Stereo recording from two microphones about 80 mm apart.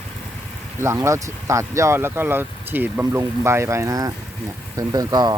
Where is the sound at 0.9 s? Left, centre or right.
Right.